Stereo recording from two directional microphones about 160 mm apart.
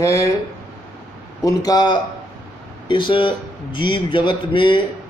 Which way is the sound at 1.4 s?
20° left (ahead or behind).